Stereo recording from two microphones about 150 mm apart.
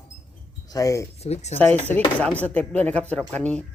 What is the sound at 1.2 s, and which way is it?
Speech, 45° left (ahead or behind).